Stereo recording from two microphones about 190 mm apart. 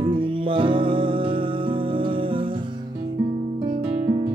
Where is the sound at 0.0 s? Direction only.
25° right (ahead or behind).